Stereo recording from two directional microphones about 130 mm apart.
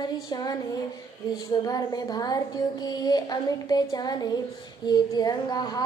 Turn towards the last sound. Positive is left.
turn(degrees=30)  # may be behind; listen again after turning